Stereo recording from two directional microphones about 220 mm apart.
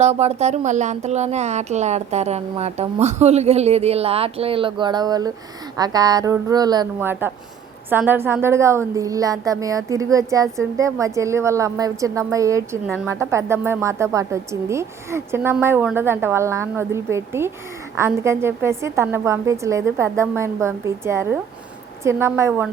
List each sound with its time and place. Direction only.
0.0 s a woman's voice: 30° right (ahead or behind); by 22.7 s 10° right (ahead or behind)